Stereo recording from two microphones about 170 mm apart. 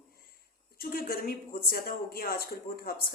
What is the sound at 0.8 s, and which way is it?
A woman's voice, 60° left (ahead or behind).